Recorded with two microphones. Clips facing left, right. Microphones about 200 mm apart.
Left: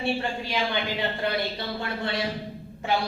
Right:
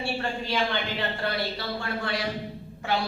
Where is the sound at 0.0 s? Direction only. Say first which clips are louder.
Left 2 dB; 15° left (ahead or behind).